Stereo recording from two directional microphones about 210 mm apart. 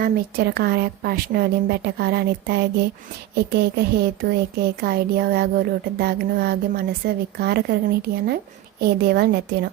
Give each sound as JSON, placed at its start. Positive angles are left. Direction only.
{"t": 0.0, "sound": "speech", "side_deg": -50}